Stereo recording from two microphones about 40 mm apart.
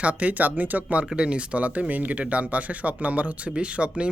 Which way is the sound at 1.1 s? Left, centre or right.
Right.